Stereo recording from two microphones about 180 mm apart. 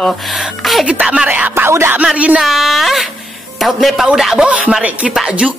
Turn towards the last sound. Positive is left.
turn(degrees=-5)  # may be behind; listen again after turning